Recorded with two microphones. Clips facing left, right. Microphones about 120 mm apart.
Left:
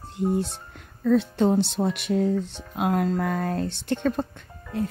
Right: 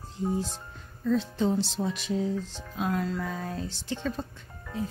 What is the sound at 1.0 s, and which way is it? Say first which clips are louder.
Speech: left 6 dB; 60° left (ahead or behind).